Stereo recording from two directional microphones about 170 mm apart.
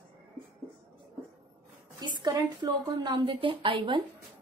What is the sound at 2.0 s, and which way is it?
A woman's voice, 25° right (ahead or behind).